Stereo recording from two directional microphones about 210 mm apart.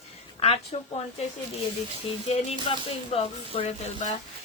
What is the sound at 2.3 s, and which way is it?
Speech, 30° left (ahead or behind).